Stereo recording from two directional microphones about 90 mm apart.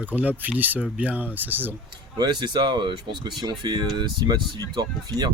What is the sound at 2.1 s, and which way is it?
Speech, 55° right (ahead or behind).